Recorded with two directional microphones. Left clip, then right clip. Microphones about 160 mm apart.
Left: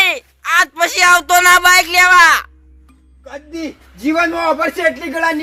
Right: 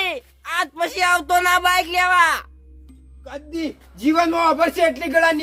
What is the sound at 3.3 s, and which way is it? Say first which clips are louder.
A man's voice: left 2 dB; 30° right (ahead or behind).